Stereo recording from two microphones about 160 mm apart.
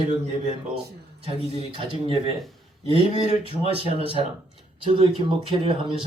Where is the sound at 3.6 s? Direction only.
35° right (ahead or behind).